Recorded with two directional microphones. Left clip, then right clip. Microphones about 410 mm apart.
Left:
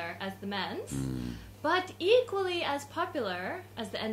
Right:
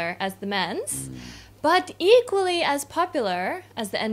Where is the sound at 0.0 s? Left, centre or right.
Right.